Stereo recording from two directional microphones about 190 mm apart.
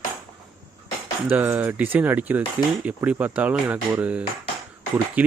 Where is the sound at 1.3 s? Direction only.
10° right (ahead or behind).